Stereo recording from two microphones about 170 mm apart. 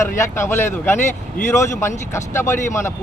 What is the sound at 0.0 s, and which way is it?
A man's voice, 15° left (ahead or behind).